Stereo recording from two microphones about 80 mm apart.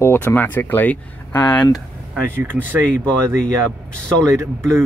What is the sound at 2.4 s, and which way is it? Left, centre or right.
Speech, right.